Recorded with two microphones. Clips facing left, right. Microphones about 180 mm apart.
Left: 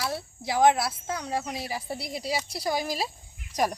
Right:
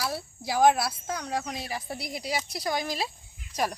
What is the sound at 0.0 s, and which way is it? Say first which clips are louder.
Speech: left 1 dB; centre (ahead or behind).